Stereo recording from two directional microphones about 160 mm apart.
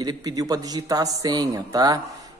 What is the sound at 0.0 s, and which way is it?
Speech, 25° right (ahead or behind).